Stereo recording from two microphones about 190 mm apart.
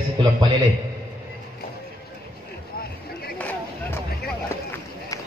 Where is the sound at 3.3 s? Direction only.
10° left (ahead or behind).